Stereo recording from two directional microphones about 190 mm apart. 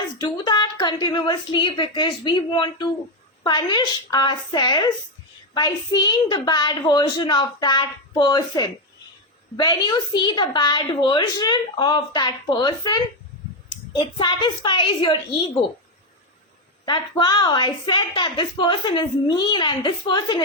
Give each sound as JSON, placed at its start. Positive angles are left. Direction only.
{"t": 0.2, "sound": "a woman's voice", "side_deg": 20}
{"t": 16.8, "sound": "a woman's voice", "side_deg": 25}